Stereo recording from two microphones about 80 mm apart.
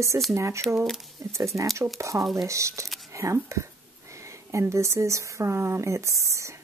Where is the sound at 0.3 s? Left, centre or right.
Right.